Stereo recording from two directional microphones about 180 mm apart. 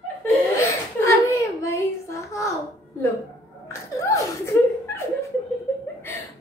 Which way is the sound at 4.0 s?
15° left (ahead or behind).